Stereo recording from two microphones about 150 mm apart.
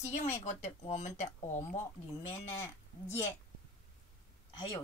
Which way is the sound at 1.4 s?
15° left (ahead or behind).